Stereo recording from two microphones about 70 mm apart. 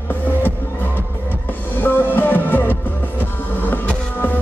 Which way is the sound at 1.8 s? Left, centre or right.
Left.